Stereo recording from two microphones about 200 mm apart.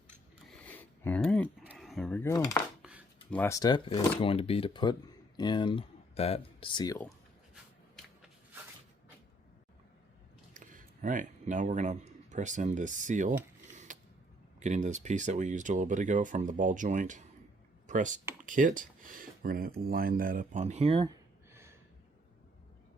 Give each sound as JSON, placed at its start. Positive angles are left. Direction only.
{"t": 0.6, "sound": "a sound", "side_deg": 10}
{"t": 2.3, "sound": "speech", "side_deg": 15}
{"t": 10.5, "sound": "speech", "side_deg": -40}
{"t": 13.7, "sound": "mechanisms", "side_deg": -40}
{"t": 14.6, "sound": "speech", "side_deg": -35}
{"t": 21.5, "sound": "a sound", "side_deg": -15}